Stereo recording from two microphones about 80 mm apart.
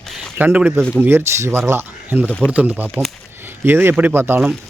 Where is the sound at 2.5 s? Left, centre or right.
Centre.